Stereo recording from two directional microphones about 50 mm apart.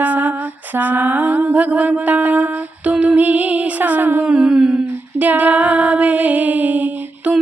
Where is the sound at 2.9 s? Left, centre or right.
Right.